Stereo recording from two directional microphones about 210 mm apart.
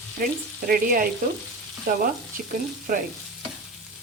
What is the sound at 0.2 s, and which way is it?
Speech, 45° right (ahead or behind).